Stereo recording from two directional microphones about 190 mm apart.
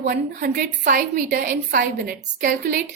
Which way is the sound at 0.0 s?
50° right (ahead or behind).